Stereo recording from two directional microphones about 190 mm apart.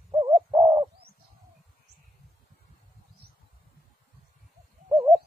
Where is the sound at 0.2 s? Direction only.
25° right (ahead or behind).